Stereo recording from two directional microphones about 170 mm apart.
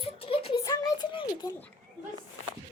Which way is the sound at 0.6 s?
20° left (ahead or behind).